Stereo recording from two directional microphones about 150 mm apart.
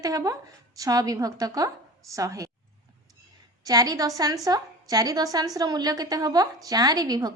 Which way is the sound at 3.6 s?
25° right (ahead or behind).